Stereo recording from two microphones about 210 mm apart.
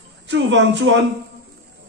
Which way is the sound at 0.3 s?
60° right (ahead or behind).